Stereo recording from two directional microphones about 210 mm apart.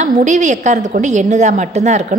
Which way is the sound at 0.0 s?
35° right (ahead or behind).